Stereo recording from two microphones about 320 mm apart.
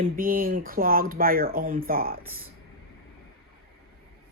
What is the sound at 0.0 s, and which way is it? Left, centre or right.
A woman's voice, right.